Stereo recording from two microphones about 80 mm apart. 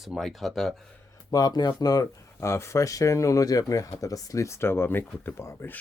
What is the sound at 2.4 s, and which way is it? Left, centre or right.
Speech, left.